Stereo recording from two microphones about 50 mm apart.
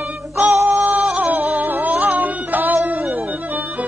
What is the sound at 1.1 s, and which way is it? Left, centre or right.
Female singing, right.